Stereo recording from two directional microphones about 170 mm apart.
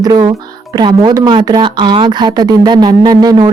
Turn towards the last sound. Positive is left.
turn(degrees=-25)  # may be behind; listen again after turning